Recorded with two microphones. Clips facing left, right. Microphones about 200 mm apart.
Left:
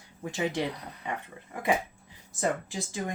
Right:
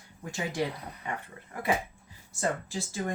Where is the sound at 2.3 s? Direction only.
15° left (ahead or behind).